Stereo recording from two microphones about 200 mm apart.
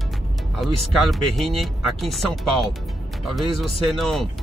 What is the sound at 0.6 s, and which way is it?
Speech, centre (ahead or behind).